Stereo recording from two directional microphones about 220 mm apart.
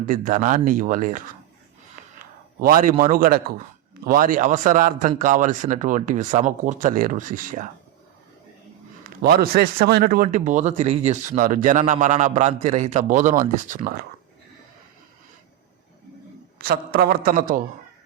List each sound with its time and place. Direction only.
0.0 s speech: 35° right (ahead or behind)
2.6 s speech: 40° right (ahead or behind)
9.2 s speech: 40° right (ahead or behind)
16.6 s a woman's voice: 45° right (ahead or behind)